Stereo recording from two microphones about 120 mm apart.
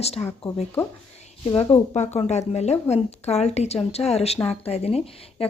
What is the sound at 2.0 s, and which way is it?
Speech, 65° left (ahead or behind).